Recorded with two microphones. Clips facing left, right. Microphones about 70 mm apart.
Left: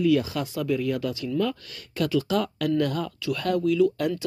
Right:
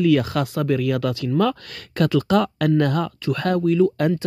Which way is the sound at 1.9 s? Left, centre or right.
Right.